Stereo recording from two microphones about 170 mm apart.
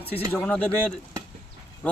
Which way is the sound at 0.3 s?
10° left (ahead or behind).